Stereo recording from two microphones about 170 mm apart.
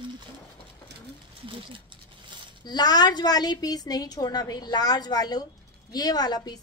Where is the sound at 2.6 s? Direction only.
25° left (ahead or behind).